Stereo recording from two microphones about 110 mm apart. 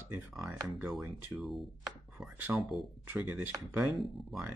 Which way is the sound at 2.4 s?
15° right (ahead or behind).